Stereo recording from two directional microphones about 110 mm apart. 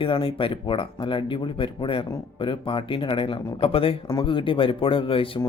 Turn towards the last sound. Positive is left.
turn(degrees=55)  # may be behind; listen again after turning